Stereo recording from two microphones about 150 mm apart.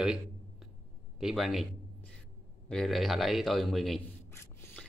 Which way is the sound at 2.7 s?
Centre (ahead or behind).